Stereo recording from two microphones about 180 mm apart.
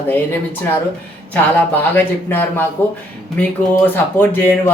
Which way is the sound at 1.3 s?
10° left (ahead or behind).